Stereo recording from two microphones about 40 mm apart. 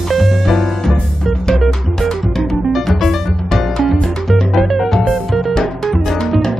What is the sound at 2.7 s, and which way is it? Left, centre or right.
Music, centre.